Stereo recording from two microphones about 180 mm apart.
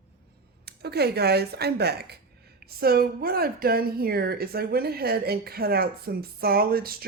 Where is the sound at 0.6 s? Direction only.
65° right (ahead or behind).